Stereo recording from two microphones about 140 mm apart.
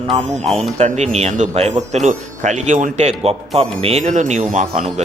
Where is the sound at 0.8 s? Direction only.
55° right (ahead or behind).